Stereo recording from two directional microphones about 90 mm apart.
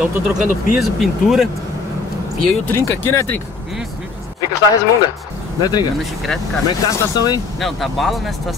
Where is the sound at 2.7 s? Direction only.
30° left (ahead or behind).